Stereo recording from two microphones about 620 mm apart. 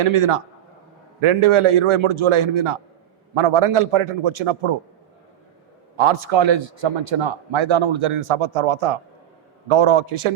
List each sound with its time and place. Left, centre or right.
0.0 s a man's voice: right
6.0 s a man's voice: right